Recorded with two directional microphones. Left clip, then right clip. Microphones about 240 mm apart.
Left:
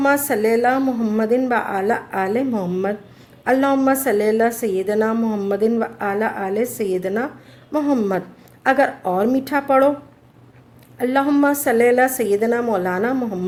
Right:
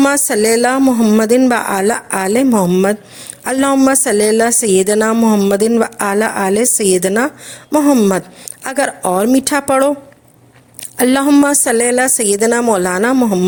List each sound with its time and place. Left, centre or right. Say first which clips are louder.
0.0 s a woman's voice: right 5 dB; right
10.9 s a woman's voice: right 7 dB; right